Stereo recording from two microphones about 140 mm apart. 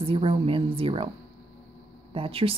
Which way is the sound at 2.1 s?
45° right (ahead or behind).